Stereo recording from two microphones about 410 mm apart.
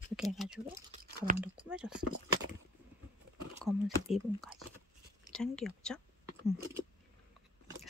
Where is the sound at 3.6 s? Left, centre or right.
Centre.